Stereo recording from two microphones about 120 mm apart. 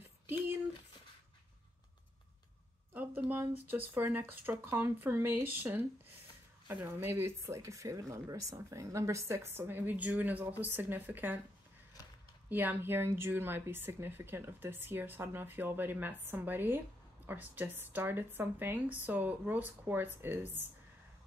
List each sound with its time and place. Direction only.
0.0 s a sound: 15° right (ahead or behind)
3.3 s a woman's voice: 15° right (ahead or behind)
12.4 s a woman's voice: 15° right (ahead or behind)